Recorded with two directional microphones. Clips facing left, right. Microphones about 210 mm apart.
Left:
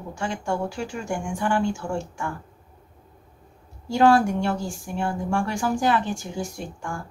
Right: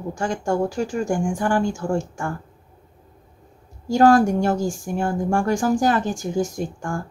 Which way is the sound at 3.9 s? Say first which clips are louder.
Right 3 dB; 45° right (ahead or behind).